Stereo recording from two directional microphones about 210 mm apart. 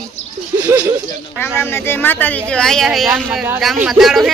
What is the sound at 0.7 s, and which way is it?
Speech, 10° right (ahead or behind).